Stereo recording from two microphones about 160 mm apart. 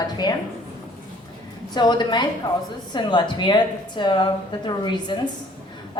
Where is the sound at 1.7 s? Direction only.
25° left (ahead or behind).